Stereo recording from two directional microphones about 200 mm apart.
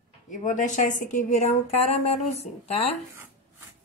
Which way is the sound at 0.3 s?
40° left (ahead or behind).